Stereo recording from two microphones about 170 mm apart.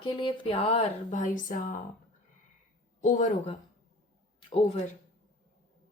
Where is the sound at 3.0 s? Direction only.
45° left (ahead or behind).